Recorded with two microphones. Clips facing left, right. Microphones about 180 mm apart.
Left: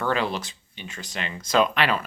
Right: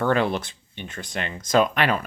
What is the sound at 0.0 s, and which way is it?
Speech, 55° right (ahead or behind).